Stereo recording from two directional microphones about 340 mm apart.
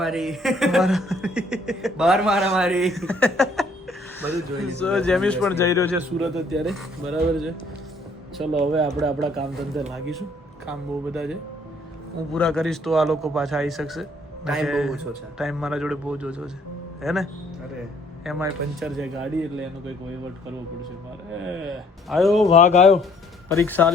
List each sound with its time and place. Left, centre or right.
0.0 s a man's voice: centre
8.7 s a man's voice: centre
18.3 s a man's voice: centre
21.6 s a man's voice: centre
22.4 s speech: centre
23.5 s a man's voice: centre